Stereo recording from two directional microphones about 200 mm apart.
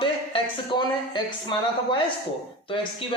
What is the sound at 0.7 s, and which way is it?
A man's voice, 25° left (ahead or behind).